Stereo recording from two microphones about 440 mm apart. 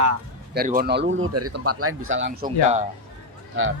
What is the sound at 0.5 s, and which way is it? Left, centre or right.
Speech, centre.